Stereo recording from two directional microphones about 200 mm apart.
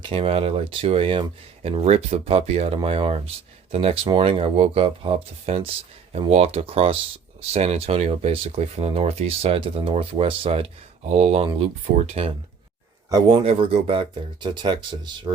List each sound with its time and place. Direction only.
0.0 s speech: 30° right (ahead or behind)
13.1 s speech: 20° right (ahead or behind)